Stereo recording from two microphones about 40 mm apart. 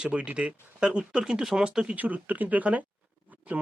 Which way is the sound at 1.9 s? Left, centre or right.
Right.